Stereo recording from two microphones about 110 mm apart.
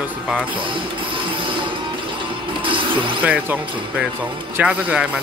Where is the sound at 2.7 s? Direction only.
50° right (ahead or behind).